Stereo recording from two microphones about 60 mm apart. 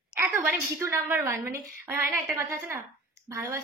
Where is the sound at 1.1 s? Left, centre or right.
Right.